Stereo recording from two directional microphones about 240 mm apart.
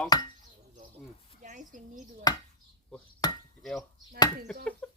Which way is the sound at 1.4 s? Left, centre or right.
Right.